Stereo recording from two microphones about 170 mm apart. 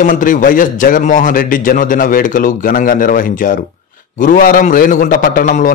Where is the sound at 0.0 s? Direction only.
50° left (ahead or behind).